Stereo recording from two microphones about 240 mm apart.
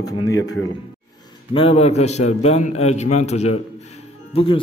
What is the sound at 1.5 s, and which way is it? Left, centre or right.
A man's voice, left.